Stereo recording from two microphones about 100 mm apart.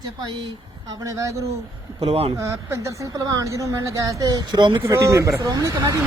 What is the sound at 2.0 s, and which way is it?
Speech, 85° right.